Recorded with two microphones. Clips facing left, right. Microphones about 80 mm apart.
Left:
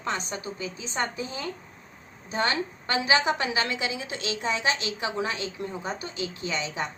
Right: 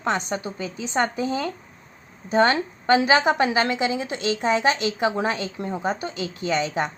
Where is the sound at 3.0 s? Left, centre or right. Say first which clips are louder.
Right 1 dB; right.